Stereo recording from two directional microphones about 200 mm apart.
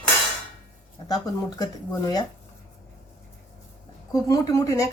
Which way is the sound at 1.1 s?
20° left (ahead or behind).